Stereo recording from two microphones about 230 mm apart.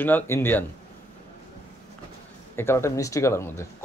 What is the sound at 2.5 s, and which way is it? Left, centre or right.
Speech, centre.